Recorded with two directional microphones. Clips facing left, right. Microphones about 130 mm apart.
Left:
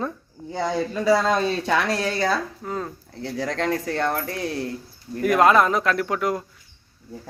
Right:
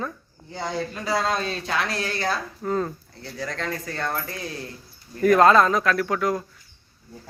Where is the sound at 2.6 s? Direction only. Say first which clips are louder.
Right 4 dB; 5° left (ahead or behind).